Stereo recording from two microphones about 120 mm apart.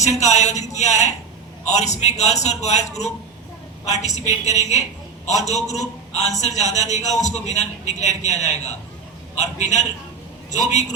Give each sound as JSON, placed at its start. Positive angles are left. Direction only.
{"t": 0.0, "sound": "a man's voice", "side_deg": 70}